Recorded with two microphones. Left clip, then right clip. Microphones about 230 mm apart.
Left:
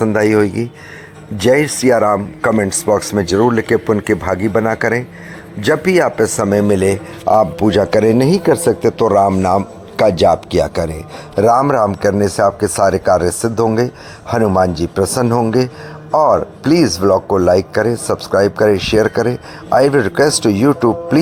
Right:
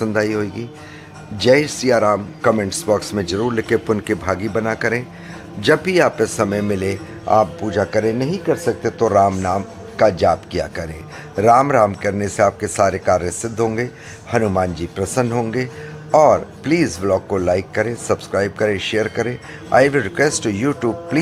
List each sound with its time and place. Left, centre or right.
0.0 s speech: centre
12.5 s speech: centre
13.1 s speech: left